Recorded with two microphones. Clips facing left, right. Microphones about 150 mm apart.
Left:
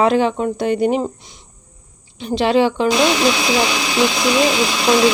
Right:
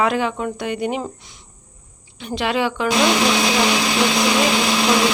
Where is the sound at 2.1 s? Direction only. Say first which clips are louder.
Left 6 dB; 30° left (ahead or behind).